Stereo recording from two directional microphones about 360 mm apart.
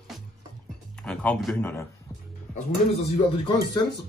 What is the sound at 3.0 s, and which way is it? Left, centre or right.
Speech, centre.